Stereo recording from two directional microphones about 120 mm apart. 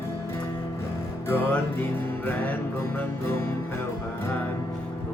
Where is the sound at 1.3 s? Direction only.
20° left (ahead or behind).